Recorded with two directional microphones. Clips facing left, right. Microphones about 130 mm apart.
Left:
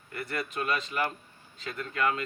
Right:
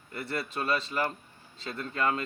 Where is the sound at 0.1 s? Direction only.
30° right (ahead or behind).